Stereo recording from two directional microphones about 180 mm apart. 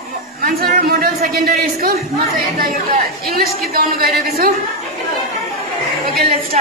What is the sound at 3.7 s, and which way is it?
Music, 55° right (ahead or behind).